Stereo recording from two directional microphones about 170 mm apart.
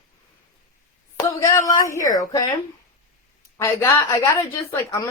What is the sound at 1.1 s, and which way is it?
Speech, 20° left (ahead or behind).